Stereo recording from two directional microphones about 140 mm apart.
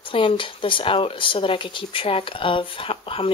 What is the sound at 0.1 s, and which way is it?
Speech, 40° left (ahead or behind).